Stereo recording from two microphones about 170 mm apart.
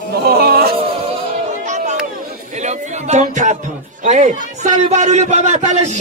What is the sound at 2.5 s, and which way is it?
A man's voice, 45° right (ahead or behind).